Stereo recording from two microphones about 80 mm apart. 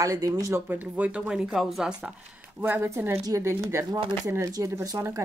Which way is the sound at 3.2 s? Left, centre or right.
Right.